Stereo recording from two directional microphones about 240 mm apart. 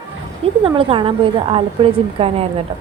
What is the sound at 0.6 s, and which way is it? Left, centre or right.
A woman's voice, right.